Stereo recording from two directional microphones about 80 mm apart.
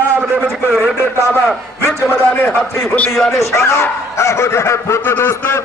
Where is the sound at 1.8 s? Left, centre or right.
Left.